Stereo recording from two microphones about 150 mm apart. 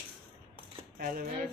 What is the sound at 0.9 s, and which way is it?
Speech, 70° right (ahead or behind).